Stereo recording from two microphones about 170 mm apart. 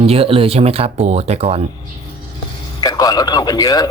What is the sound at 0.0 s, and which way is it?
Speech, 35° right (ahead or behind).